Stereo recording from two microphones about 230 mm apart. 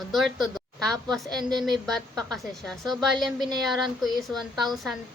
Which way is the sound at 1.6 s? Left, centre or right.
Centre.